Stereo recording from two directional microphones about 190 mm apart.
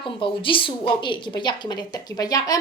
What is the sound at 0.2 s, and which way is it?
A woman's voice, 25° left (ahead or behind).